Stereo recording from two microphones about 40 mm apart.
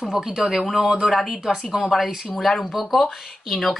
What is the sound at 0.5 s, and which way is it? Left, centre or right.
A woman's voice, centre.